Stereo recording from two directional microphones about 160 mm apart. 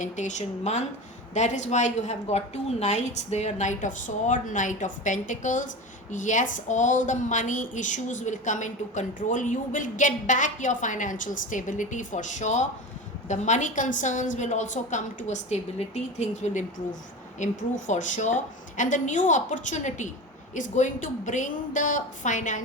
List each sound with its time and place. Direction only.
0.0 s a woman's voice: 50° left (ahead or behind)